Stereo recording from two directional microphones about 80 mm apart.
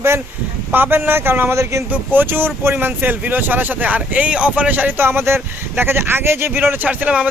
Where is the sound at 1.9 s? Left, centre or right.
Right.